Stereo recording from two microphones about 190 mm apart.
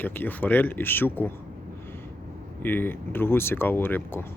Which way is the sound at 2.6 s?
10° left (ahead or behind).